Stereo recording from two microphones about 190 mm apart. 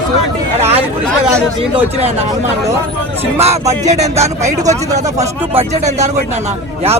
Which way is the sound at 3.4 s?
35° right (ahead or behind).